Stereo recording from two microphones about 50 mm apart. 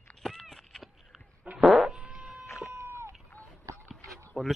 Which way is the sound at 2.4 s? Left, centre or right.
Left.